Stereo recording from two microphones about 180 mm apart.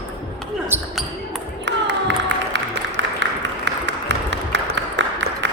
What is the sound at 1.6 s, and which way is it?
Music, 80° right.